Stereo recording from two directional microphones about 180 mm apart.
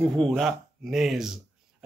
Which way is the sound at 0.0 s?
5° left (ahead or behind).